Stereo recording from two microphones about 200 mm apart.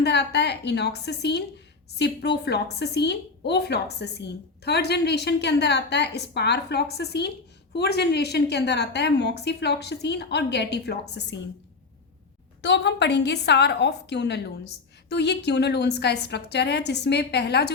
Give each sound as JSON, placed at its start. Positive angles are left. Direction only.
{"t": 0.0, "sound": "a woman's voice", "side_deg": 55}
{"t": 12.6, "sound": "a woman's voice", "side_deg": 60}